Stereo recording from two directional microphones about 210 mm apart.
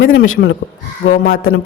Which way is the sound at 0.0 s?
65° left (ahead or behind).